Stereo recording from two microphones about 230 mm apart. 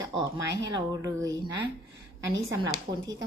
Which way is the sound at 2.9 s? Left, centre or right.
Right.